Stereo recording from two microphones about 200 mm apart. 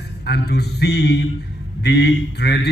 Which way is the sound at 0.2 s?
55° left (ahead or behind).